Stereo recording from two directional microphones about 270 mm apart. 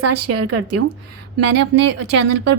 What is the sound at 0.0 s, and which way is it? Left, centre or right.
Speech, right.